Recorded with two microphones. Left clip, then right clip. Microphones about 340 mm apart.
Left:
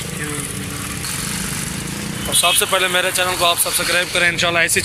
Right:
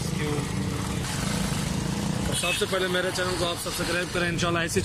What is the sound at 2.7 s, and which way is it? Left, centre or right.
Speech, left.